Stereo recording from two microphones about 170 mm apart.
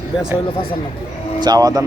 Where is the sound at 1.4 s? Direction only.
20° right (ahead or behind).